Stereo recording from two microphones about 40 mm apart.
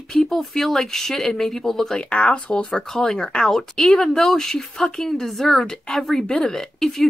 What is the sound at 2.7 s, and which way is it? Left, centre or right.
Speech, centre.